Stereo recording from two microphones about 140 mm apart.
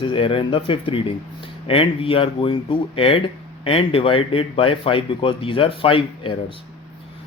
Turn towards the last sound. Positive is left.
turn(degrees=40)  # may be behind; listen again after turning